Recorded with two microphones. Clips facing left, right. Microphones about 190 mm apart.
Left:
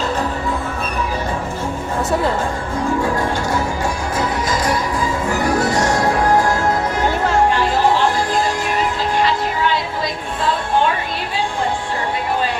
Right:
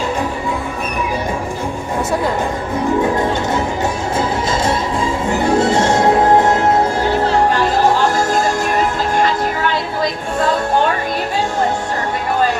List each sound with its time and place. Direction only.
4.2 s music: 25° right (ahead or behind)